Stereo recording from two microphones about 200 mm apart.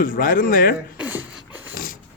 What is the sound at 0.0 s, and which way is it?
Speech, 45° left (ahead or behind).